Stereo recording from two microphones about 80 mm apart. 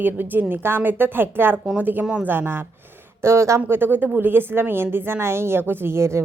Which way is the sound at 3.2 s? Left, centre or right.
Right.